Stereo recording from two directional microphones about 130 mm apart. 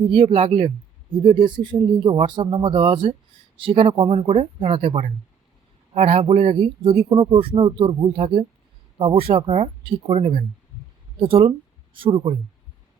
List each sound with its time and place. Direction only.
0.1 s speech: 40° right (ahead or behind)
7.1 s speech: 35° right (ahead or behind)